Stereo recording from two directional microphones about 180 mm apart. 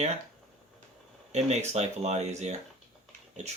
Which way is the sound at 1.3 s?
40° right (ahead or behind).